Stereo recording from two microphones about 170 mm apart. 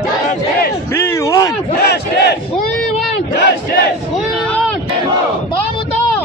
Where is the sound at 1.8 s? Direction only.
70° left (ahead or behind).